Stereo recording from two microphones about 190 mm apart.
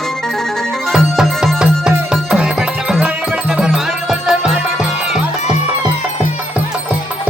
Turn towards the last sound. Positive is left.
turn(degrees=-10)  # may be behind; listen again after turning